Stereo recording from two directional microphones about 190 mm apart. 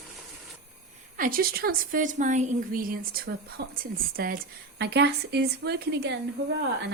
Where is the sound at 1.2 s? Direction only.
50° right (ahead or behind).